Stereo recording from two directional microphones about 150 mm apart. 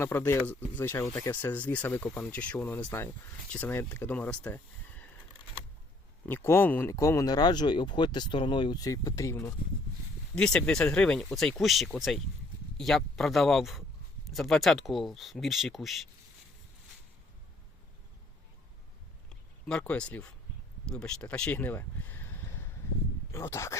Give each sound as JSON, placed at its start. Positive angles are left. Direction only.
{"t": 0.0, "sound": "speech", "side_deg": 15}
{"t": 6.2, "sound": "speech", "side_deg": 15}
{"t": 10.3, "sound": "speech", "side_deg": 5}
{"t": 19.6, "sound": "speech", "side_deg": 5}